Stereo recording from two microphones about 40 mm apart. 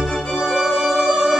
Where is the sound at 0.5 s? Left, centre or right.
Centre.